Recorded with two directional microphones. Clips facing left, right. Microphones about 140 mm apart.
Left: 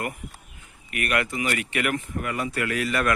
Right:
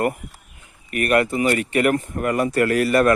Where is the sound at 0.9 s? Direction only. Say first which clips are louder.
Right 8 dB; 40° right (ahead or behind).